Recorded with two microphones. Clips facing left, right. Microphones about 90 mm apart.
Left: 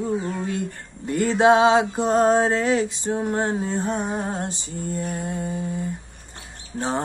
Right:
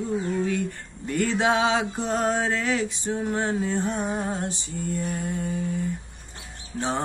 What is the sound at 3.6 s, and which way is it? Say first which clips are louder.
Music: left 1 dB; 25° left (ahead or behind).